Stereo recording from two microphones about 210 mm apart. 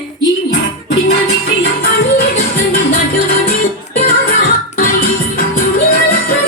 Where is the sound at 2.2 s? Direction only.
45° left (ahead or behind).